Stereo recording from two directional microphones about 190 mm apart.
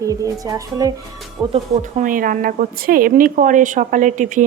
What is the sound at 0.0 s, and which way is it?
A woman's voice, 15° right (ahead or behind).